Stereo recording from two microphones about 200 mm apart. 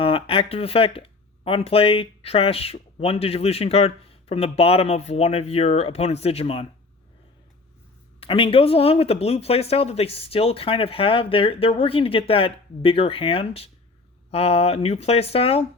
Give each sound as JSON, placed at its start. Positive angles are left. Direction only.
{"t": 0.0, "sound": "speech", "side_deg": 25}
{"t": 8.2, "sound": "speech", "side_deg": 25}